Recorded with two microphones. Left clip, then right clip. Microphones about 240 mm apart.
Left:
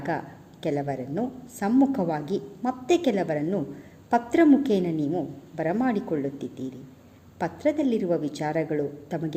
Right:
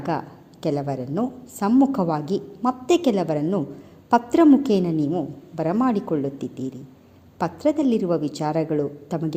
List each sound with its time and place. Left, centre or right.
0.6 s a woman's voice: right